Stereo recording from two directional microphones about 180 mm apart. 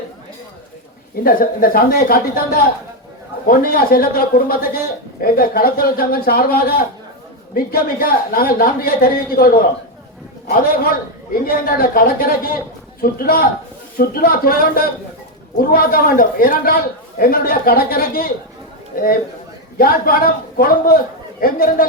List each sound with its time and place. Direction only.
1.1 s a man's voice: 55° left (ahead or behind)
11.4 s a man's voice: 55° left (ahead or behind)